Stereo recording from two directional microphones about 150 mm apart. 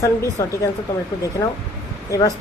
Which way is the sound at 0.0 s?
20° left (ahead or behind).